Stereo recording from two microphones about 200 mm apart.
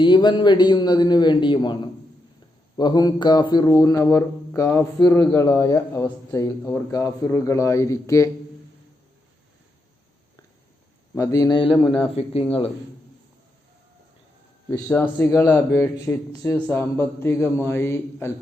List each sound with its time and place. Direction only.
0.0 s a man's voice: 20° left (ahead or behind)
11.2 s speech: 15° left (ahead or behind)
14.7 s a man's voice: 10° left (ahead or behind)